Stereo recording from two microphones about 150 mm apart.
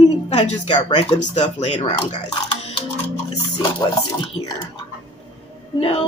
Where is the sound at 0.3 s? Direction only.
50° left (ahead or behind).